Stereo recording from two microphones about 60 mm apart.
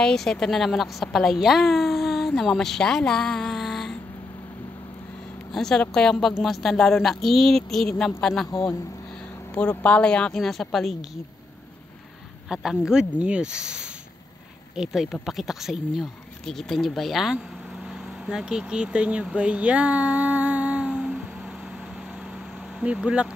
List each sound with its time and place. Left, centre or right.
0.0 s a woman's voice: centre
5.5 s a woman's voice: centre
9.5 s speech: left
10.4 s a woman's voice: centre
12.4 s a woman's voice: centre
17.9 s a sound: centre
22.9 s speech: centre